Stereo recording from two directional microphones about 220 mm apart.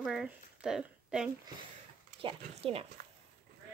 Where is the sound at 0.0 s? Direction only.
Centre (ahead or behind).